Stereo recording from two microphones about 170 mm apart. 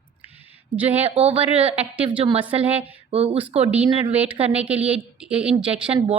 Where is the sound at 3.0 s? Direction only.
35° right (ahead or behind).